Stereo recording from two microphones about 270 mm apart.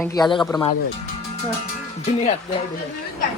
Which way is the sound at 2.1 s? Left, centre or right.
Left.